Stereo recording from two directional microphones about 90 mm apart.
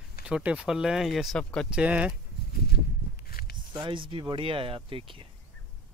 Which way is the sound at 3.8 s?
70° right (ahead or behind).